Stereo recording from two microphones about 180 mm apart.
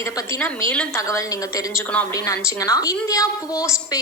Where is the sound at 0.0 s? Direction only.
15° left (ahead or behind).